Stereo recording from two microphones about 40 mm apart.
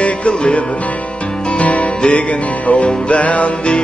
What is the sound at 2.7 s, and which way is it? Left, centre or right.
Mantra, left.